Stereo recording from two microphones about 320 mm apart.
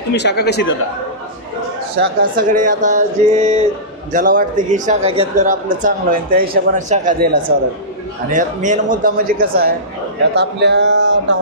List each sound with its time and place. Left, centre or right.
0.1 s speech: left
2.0 s a man's voice: right
8.3 s a man's voice: right